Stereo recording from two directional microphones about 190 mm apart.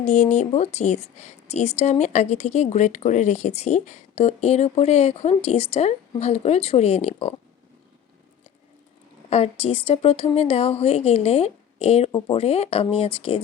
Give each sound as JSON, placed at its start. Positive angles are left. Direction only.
{"t": 0.0, "sound": "a woman's voice", "side_deg": 40}
{"t": 9.3, "sound": "a woman's voice", "side_deg": 30}